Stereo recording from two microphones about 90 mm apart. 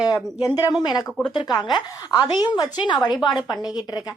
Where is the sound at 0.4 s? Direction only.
45° left (ahead or behind).